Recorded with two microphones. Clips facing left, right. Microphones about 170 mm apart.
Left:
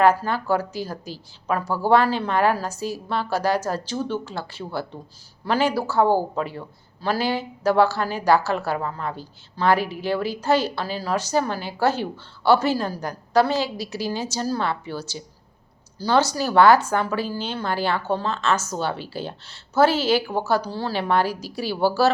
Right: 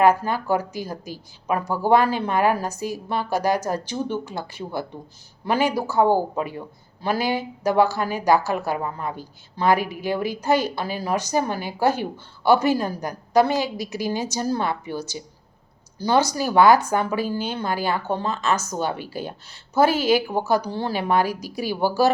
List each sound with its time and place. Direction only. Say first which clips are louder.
0.0 s speech: even; 15° right (ahead or behind)